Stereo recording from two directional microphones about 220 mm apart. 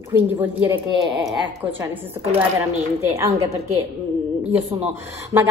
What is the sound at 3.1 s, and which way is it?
Speech, 15° right (ahead or behind).